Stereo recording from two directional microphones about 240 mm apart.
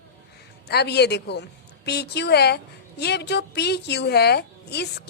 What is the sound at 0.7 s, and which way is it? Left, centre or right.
A woman's voice, left.